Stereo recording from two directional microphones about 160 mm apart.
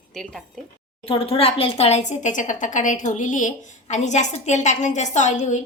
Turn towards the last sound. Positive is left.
turn(degrees=50)  # may be behind; listen again after turning